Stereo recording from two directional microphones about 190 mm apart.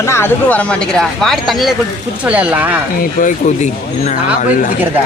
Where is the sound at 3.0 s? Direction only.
40° left (ahead or behind).